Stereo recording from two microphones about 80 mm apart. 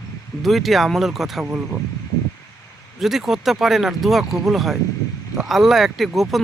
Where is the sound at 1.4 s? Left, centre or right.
Right.